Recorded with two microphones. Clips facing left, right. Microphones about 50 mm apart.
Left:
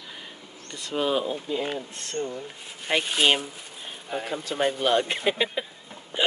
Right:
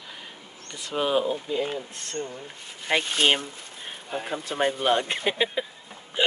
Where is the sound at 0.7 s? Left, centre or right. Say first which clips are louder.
Even; centre.